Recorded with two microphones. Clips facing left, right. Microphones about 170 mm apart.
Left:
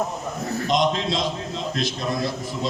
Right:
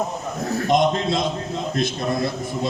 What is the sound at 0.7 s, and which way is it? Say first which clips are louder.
A man's voice: right 3 dB; 55° right (ahead or behind).